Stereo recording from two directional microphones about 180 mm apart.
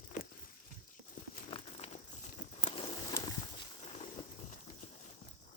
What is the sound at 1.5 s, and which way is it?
Crumpling, 30° left (ahead or behind).